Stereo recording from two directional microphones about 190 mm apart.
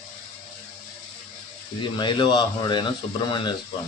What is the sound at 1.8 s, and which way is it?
Speech, 25° left (ahead or behind).